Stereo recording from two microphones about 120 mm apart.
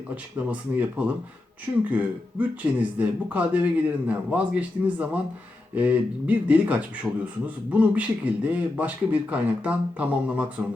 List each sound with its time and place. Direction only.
0.5 s speech: 10° right (ahead or behind)